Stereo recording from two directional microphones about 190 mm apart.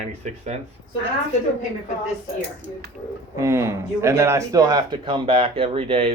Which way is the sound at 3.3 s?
15° right (ahead or behind).